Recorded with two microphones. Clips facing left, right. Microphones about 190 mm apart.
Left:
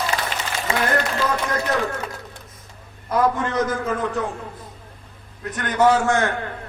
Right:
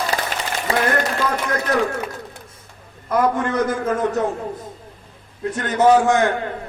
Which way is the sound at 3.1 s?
50° right (ahead or behind).